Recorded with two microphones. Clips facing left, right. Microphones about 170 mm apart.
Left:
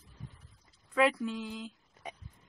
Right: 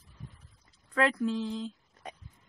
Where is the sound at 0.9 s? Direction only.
10° left (ahead or behind).